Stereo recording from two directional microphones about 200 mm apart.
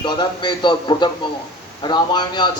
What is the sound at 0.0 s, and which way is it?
Speech, 20° left (ahead or behind).